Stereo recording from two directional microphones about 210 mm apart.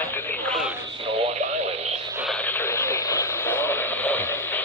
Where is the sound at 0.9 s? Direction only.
25° right (ahead or behind).